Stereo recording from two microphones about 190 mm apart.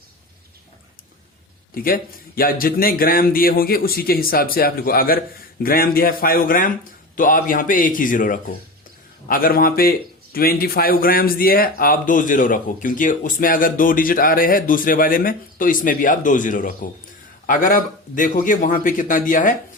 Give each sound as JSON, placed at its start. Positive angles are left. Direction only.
{"t": 1.7, "sound": "speech", "side_deg": 50}